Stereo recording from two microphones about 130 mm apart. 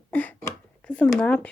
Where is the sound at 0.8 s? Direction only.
10° left (ahead or behind).